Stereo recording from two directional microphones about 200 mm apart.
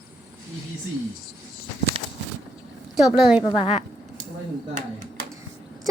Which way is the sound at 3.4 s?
25° left (ahead or behind).